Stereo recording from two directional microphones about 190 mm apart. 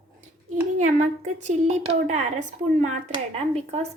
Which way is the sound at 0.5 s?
40° right (ahead or behind).